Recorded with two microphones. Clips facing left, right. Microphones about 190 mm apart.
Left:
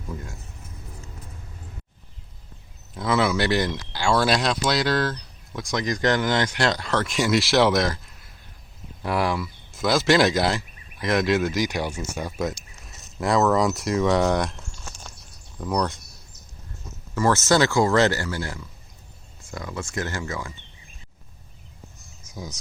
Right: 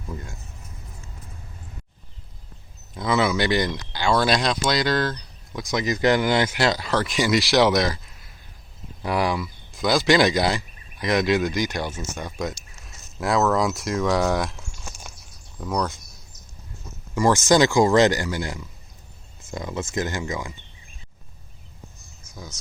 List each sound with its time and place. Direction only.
2.9 s speech: centre (ahead or behind)
14.7 s a sound: 10° right (ahead or behind)
15.5 s speech: centre (ahead or behind)
17.2 s speech: 15° right (ahead or behind)